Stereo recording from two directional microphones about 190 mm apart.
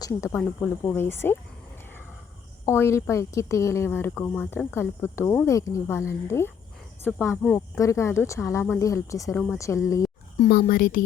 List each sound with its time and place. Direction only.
0.0 s a woman's voice: 15° left (ahead or behind)
2.6 s a woman's voice: 15° left (ahead or behind)
10.3 s speech: 35° left (ahead or behind)